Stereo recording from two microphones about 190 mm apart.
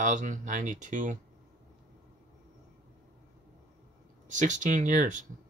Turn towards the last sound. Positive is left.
turn(degrees=-40)  # may be behind; listen again after turning